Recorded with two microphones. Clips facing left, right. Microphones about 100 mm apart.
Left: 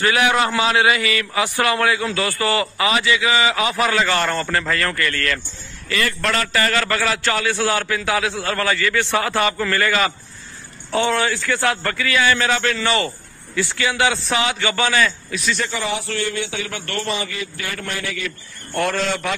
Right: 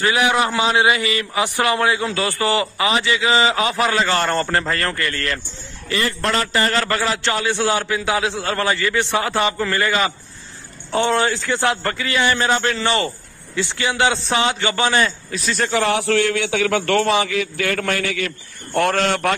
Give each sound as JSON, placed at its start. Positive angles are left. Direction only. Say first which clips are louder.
{"t": 0.0, "sound": "a man's voice", "louder": "even", "side_deg": -20}
{"t": 15.6, "sound": "a man's voice", "louder": "right 6 dB", "side_deg": -60}